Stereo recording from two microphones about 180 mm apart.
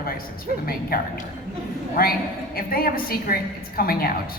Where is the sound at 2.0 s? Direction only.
55° left (ahead or behind).